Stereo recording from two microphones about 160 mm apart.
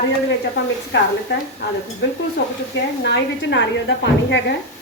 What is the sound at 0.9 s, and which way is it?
Speech, 90° left.